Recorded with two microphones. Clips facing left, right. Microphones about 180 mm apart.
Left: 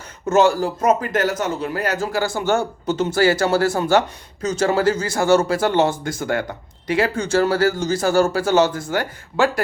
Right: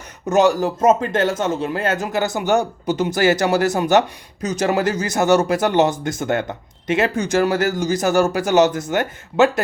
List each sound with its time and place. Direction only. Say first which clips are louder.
0.3 s speech: even; 15° right (ahead or behind)